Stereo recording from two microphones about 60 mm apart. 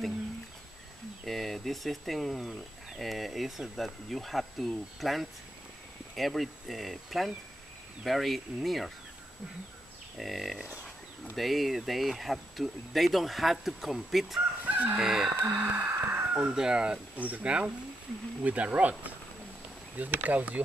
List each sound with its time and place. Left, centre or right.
1.2 s speech: centre
10.1 s speech: centre
14.7 s fowl: right
15.0 s speech: centre
15.6 s speech: right